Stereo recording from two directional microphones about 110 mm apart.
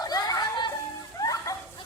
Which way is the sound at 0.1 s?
35° left (ahead or behind).